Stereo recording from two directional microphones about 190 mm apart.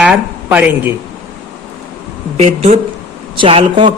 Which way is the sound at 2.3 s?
35° right (ahead or behind).